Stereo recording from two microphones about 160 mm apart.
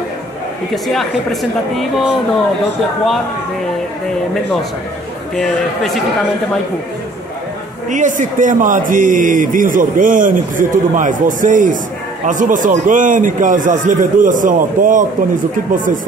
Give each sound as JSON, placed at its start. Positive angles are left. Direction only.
{"t": 0.9, "sound": "speech", "side_deg": 0}
{"t": 5.3, "sound": "speech", "side_deg": 5}
{"t": 7.9, "sound": "speech", "side_deg": -50}